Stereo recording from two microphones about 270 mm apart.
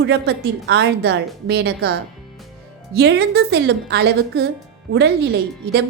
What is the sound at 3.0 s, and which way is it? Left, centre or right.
A woman's voice, right.